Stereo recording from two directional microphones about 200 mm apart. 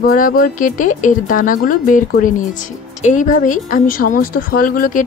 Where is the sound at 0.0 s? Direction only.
45° left (ahead or behind).